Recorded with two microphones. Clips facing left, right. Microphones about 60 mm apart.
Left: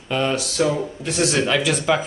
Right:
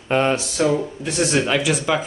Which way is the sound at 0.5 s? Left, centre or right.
Centre.